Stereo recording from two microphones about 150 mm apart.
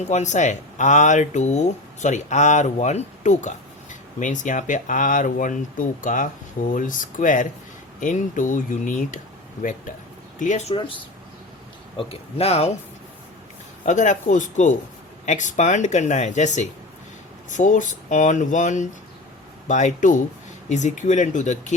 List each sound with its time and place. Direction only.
0.0 s speech: 50° left (ahead or behind)
10.4 s speech: 50° left (ahead or behind)
10.8 s speech: 35° left (ahead or behind)
13.8 s speech: 55° left (ahead or behind)